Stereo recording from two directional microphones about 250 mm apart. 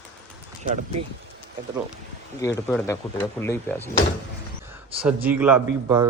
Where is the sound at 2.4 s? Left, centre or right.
Centre.